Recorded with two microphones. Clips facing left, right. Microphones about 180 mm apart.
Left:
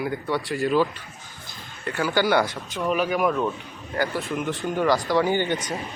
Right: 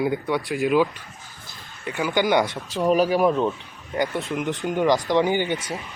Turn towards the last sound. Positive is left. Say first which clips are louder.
# even
turn(degrees=-10)  # may be behind; listen again after turning